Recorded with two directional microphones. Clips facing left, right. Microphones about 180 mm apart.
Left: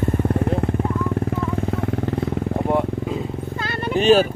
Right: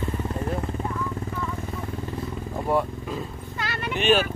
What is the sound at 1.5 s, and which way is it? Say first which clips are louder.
Vehicle: left 9 dB; 70° left (ahead or behind).